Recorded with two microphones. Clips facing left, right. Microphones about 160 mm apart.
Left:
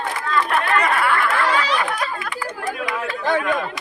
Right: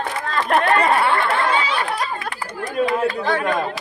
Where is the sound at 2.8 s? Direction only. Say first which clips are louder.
Right 11 dB; 35° right (ahead or behind).